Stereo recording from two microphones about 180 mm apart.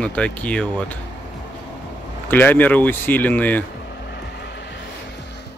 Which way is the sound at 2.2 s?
10° left (ahead or behind).